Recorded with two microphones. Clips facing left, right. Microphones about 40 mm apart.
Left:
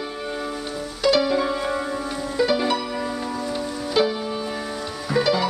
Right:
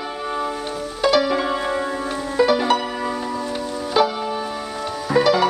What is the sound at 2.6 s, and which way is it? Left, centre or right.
Music, right.